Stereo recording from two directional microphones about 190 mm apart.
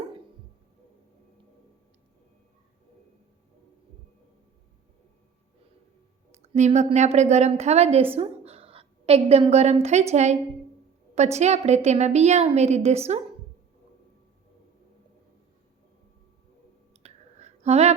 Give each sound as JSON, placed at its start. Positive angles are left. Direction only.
{"t": 6.4, "sound": "a woman's voice", "side_deg": -35}
{"t": 16.9, "sound": "clicking", "side_deg": -35}